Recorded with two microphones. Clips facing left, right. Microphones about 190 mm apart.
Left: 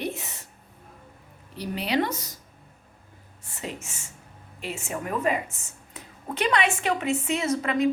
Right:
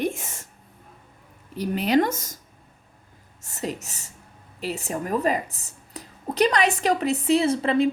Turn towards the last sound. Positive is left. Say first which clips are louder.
# right 3 dB
turn(degrees=-30)  # may be behind; listen again after turning